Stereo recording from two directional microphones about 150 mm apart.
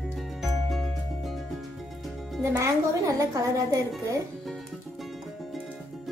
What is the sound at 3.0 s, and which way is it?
Speech, 20° right (ahead or behind).